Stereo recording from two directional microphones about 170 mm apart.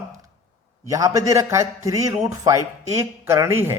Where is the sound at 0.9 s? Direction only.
20° right (ahead or behind).